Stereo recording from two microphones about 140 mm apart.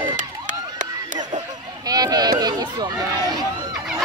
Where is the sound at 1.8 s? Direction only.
25° right (ahead or behind).